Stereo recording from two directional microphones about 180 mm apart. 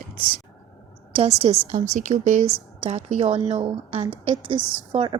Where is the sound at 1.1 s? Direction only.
35° right (ahead or behind).